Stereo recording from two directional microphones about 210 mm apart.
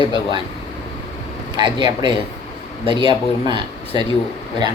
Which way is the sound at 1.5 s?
20° right (ahead or behind).